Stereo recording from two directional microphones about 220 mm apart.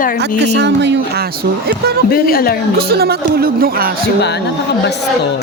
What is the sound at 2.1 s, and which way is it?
Speech, 40° left (ahead or behind).